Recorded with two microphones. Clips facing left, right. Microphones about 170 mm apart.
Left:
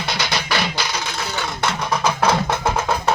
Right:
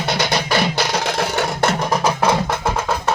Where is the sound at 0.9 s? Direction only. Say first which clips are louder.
Right 7 dB; 70° right (ahead or behind).